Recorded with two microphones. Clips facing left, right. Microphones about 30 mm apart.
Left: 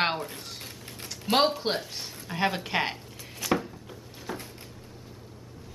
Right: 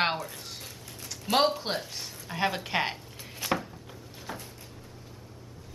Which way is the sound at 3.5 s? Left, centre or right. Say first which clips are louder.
Left 3 dB; centre.